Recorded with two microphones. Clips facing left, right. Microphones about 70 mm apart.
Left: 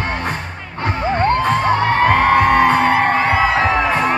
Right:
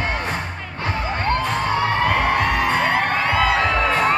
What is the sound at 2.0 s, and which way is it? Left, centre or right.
Music, left.